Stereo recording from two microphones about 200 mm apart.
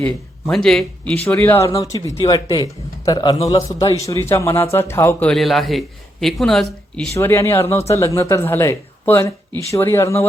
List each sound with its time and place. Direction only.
0.0 s a man's voice: 5° left (ahead or behind)